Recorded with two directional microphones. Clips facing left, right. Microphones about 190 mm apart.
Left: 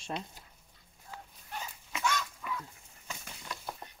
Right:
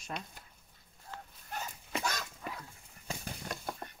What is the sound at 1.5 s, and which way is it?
Livestock, 40° right (ahead or behind).